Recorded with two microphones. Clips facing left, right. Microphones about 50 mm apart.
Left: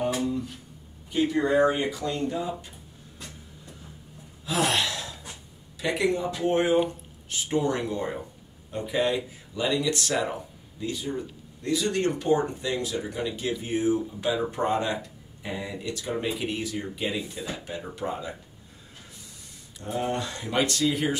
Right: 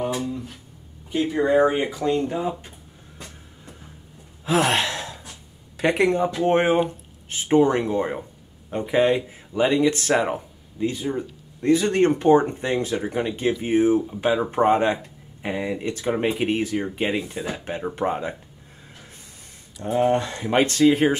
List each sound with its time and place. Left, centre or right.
0.1 s a sound: centre
1.2 s speech: right
4.5 s sigh: right
5.8 s speech: right
19.8 s speech: right